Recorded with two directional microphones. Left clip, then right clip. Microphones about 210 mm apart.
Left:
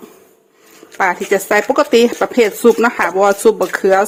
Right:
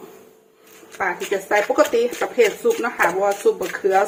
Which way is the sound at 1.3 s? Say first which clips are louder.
Left 3 dB; 55° left (ahead or behind).